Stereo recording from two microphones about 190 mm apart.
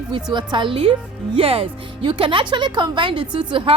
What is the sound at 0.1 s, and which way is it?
A woman's voice, 25° right (ahead or behind).